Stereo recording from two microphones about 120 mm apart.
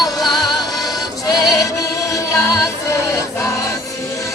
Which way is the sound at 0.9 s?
30° left (ahead or behind).